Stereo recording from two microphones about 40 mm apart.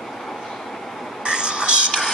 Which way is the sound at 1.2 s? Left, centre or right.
Right.